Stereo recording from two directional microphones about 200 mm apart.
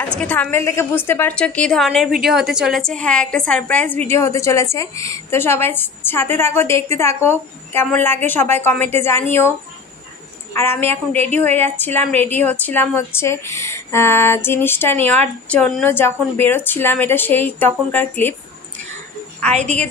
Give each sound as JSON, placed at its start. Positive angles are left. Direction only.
{"t": 0.0, "sound": "a woman's voice", "side_deg": 5}
{"t": 10.5, "sound": "a woman's voice", "side_deg": 10}
{"t": 19.5, "sound": "a woman's voice", "side_deg": -35}